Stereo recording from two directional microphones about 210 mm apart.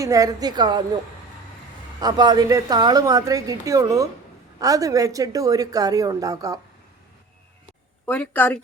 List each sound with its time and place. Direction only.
0.0 s a woman's voice: 15° right (ahead or behind)
2.0 s speech: 20° right (ahead or behind)
8.0 s a woman's voice: 10° left (ahead or behind)